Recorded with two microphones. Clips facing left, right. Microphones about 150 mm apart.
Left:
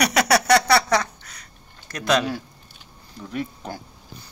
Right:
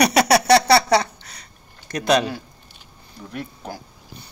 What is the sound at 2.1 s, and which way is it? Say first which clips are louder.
Speech: right 2 dB; 20° right (ahead or behind).